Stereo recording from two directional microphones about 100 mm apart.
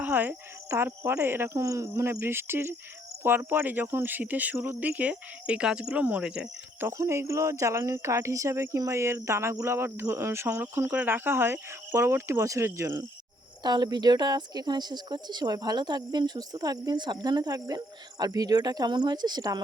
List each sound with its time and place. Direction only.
0.0 s cricket: 15° right (ahead or behind)
0.7 s speech: 25° right (ahead or behind)
4.9 s speech: 15° right (ahead or behind)
6.7 s speech: 20° right (ahead or behind)
13.6 s speech: 45° right (ahead or behind)